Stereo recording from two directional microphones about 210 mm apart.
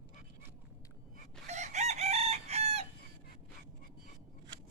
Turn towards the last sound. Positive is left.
turn(degrees=-30)  # may be behind; listen again after turning